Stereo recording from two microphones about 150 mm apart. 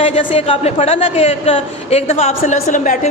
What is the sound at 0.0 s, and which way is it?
A woman's voice, 35° left (ahead or behind).